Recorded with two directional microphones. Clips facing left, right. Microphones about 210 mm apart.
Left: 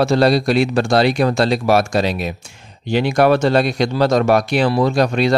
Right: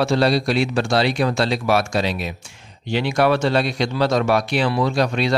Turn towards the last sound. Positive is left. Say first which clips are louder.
# left 4 dB
turn(degrees=45)  # may be behind; listen again after turning